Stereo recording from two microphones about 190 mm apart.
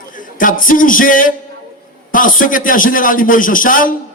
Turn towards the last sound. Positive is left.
turn(degrees=45)  # may be behind; listen again after turning